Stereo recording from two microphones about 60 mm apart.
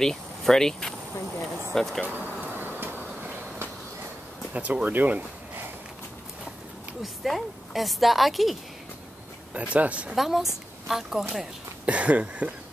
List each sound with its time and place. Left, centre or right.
0.0 s speech: centre
2.0 s speech: right
2.5 s train: right
3.0 s vehicle: right
4.6 s speech: right
7.0 s a woman's voice: centre
9.5 s speech: right
10.1 s a woman's voice: centre
11.8 s speech: right